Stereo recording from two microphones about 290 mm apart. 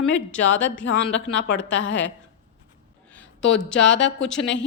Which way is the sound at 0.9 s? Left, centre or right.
Left.